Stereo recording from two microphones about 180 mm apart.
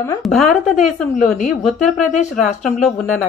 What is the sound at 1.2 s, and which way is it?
Speech, 40° left (ahead or behind).